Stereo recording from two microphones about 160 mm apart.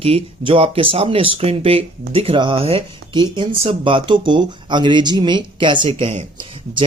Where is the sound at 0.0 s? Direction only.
35° right (ahead or behind).